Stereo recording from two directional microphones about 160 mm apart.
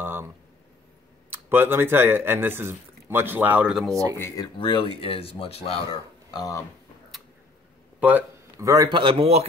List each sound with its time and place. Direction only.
0.0 s a sound: 15° right (ahead or behind)
1.3 s speech: 15° right (ahead or behind)
4.6 s speech: 35° left (ahead or behind)
8.0 s speech: 10° right (ahead or behind); by 9.5 s 40° right (ahead or behind)